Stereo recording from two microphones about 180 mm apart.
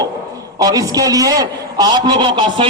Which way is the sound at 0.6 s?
20° right (ahead or behind).